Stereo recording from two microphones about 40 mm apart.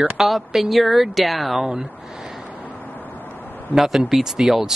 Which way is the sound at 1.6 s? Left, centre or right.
Centre.